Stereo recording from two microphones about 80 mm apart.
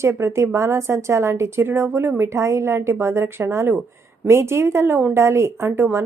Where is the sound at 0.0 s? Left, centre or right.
Right.